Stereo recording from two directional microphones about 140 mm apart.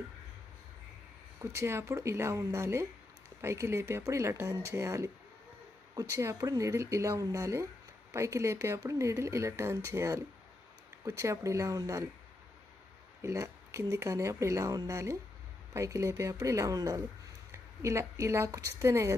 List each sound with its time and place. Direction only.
1.4 s speech: 20° right (ahead or behind)
13.2 s a woman's voice: 20° right (ahead or behind)